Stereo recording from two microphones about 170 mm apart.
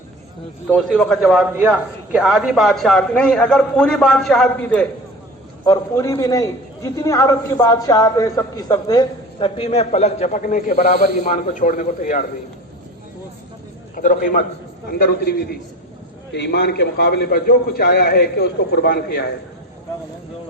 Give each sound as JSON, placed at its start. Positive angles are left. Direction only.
{"t": 0.7, "sound": "speech", "side_deg": 5}
{"t": 5.6, "sound": "a man's voice", "side_deg": 20}
{"t": 9.6, "sound": "a man's voice", "side_deg": 35}
{"t": 13.9, "sound": "a man's voice", "side_deg": 50}
{"t": 14.9, "sound": "a man's voice", "side_deg": 65}
{"t": 16.3, "sound": "a man's voice", "side_deg": 80}